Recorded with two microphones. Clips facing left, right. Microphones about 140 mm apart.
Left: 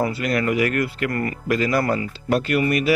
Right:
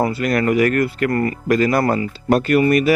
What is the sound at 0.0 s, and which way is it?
Speech, 45° right (ahead or behind).